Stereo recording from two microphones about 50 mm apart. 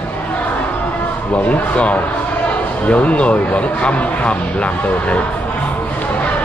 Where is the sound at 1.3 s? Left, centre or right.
Left.